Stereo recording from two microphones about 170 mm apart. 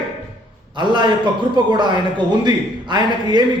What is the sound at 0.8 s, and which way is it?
A man's voice, 25° right (ahead or behind).